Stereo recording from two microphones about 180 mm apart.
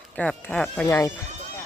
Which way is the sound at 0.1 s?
10° left (ahead or behind).